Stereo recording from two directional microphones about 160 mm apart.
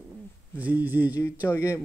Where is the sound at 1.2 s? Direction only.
15° left (ahead or behind).